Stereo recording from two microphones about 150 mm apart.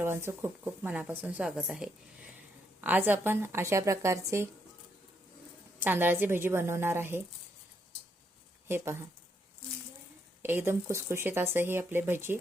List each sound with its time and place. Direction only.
0.0 s speech: 15° right (ahead or behind)
5.8 s speech: 15° right (ahead or behind)
8.6 s speech: 15° right (ahead or behind)
10.4 s speech: 15° right (ahead or behind)